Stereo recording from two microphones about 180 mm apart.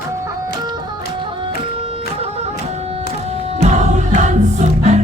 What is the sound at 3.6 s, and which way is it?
Music, 40° right (ahead or behind).